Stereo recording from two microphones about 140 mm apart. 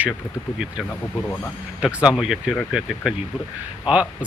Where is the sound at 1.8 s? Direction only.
10° right (ahead or behind).